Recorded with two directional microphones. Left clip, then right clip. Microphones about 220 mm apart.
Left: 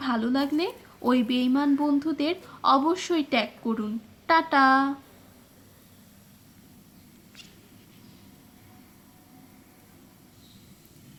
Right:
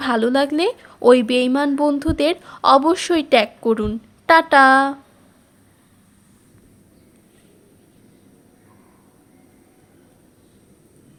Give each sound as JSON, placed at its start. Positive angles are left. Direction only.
{"t": 0.0, "sound": "speech", "side_deg": -45}